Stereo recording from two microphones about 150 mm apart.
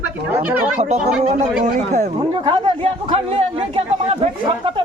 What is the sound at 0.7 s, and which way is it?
Speech, 50° right (ahead or behind).